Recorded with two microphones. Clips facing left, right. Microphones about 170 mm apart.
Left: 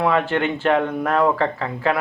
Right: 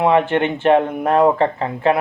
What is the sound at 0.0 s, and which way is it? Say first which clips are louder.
Speech: right 4 dB; 20° right (ahead or behind).